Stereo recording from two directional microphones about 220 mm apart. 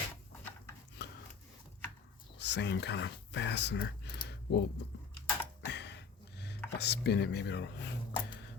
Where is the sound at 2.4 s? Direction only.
50° left (ahead or behind).